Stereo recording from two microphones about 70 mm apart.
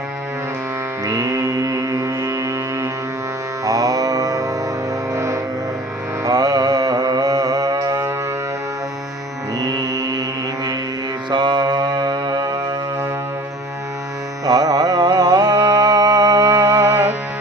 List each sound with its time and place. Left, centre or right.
1.0 s music: right
3.6 s mantra: right
5.1 s music: right
6.2 s mantra: right
9.6 s music: right
11.3 s music: right
14.4 s music: right